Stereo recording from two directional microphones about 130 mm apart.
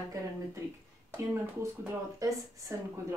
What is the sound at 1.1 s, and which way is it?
A woman's voice, 20° right (ahead or behind).